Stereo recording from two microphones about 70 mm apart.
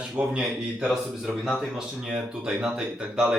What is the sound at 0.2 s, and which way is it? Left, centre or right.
Speech, centre.